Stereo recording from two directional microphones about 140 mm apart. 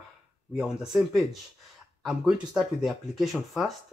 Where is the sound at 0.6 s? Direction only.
5° right (ahead or behind).